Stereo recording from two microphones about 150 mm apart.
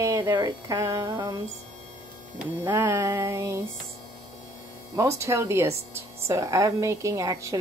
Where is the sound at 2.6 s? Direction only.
15° right (ahead or behind).